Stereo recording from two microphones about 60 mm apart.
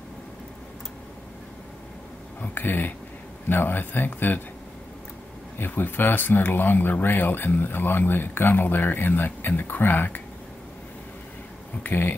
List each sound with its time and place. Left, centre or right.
2.4 s speech: left
5.6 s speech: left
11.8 s speech: left